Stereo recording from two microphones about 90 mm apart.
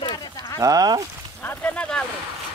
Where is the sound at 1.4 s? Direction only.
20° left (ahead or behind).